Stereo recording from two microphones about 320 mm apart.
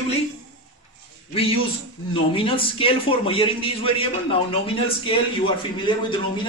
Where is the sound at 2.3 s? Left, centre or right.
Centre.